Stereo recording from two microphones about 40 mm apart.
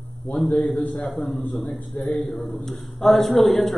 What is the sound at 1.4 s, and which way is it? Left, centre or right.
Speech, left.